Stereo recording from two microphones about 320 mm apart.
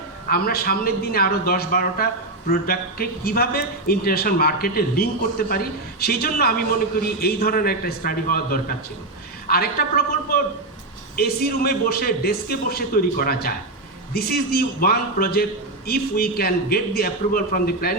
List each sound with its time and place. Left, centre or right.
0.3 s a man's voice: left